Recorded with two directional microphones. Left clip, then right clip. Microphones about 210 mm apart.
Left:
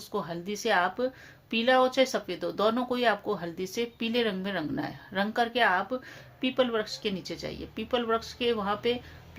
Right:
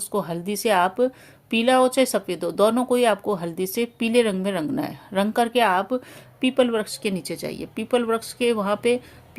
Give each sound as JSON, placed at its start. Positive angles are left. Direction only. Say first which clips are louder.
{"t": 0.1, "sound": "speech", "louder": "right 7 dB", "side_deg": -35}